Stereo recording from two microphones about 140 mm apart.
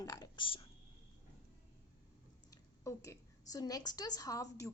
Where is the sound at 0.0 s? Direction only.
25° left (ahead or behind).